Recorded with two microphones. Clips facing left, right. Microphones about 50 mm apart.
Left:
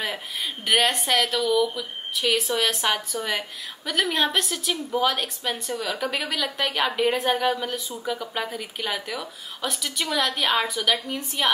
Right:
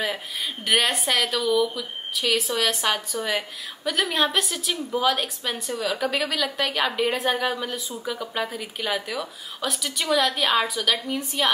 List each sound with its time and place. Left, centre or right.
0.7 s a woman's voice: centre